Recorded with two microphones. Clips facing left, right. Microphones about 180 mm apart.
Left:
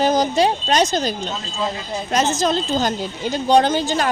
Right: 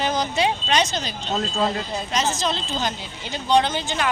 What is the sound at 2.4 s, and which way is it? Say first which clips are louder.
A woman's voice: left 6 dB; 45° left (ahead or behind).